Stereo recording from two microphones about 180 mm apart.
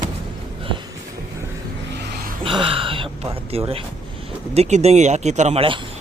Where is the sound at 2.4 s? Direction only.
30° right (ahead or behind).